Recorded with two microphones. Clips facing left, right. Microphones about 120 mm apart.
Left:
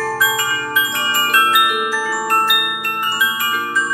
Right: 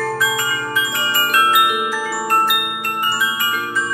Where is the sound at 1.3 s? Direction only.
20° right (ahead or behind).